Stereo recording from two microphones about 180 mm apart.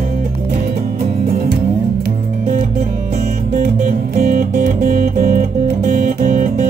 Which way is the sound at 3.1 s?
55° right (ahead or behind).